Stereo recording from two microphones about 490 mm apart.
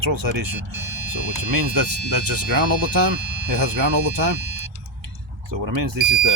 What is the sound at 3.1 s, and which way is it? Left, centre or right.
Speech, right.